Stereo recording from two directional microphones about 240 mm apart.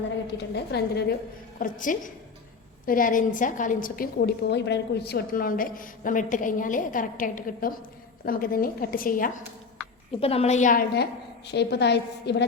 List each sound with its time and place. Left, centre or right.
0.5 s a woman's voice: left
10.2 s a woman's voice: left